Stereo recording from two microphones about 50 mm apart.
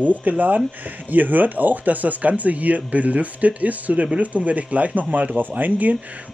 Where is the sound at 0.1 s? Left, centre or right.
Right.